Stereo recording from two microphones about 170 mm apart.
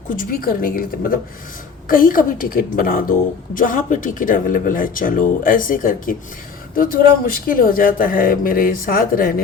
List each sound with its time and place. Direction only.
0.2 s a woman's voice: 60° left (ahead or behind)